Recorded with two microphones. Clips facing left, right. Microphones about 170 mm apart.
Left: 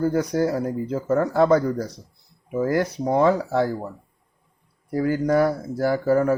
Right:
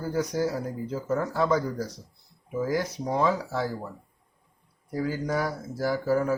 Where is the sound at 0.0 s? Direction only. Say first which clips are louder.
Left 6 dB; 60° left (ahead or behind).